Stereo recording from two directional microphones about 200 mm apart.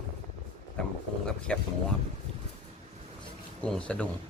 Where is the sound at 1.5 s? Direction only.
5° left (ahead or behind).